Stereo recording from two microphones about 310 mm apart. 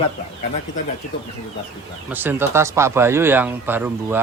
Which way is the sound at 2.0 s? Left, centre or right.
Centre.